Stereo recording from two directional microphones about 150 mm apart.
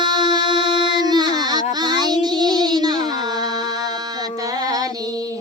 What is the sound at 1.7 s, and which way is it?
Child singing, 30° right (ahead or behind).